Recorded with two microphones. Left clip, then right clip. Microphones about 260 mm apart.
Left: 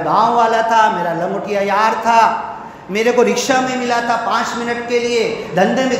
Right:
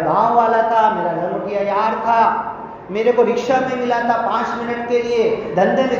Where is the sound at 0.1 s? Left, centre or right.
Left.